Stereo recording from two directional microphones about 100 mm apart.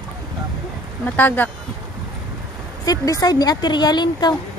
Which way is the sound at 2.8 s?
35° left (ahead or behind).